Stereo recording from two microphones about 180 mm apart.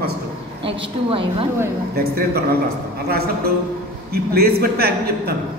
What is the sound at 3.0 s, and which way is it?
A man's voice, 60° right (ahead or behind).